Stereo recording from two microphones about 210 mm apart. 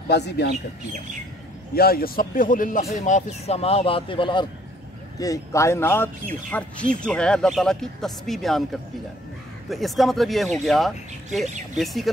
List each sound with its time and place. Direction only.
0.1 s speech: 50° left (ahead or behind)
1.8 s speech: 45° left (ahead or behind); by 8.6 s centre (ahead or behind)
9.7 s speech: centre (ahead or behind)